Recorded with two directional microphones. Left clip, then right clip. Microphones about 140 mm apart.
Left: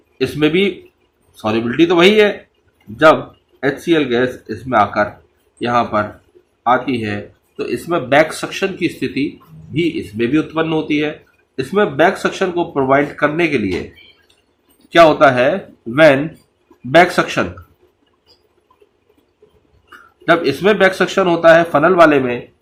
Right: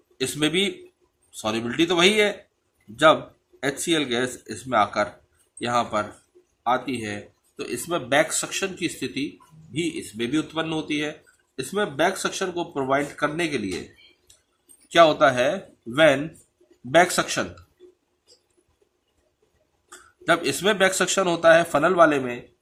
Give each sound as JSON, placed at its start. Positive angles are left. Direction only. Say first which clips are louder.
{"t": 0.2, "sound": "speech", "louder": "left 8 dB", "side_deg": -30}
{"t": 3.6, "sound": "speech", "louder": "left 9 dB", "side_deg": -35}
{"t": 14.8, "sound": "speech", "louder": "left 8 dB", "side_deg": -25}
{"t": 20.2, "sound": "speech", "louder": "left 8 dB", "side_deg": -30}